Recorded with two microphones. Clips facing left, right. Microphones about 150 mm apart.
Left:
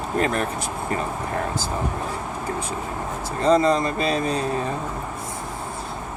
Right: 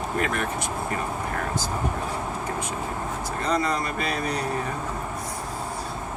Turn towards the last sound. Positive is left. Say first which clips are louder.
# left 5 dB
turn(degrees=25)  # may be behind; listen again after turning